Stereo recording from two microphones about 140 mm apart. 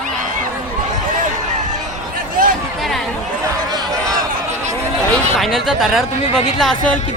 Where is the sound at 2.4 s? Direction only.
85° right.